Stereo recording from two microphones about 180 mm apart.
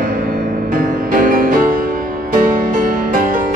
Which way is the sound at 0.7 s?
50° right (ahead or behind).